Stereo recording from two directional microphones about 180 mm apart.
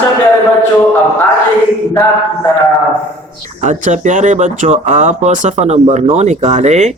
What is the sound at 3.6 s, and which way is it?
Speech, 45° right (ahead or behind).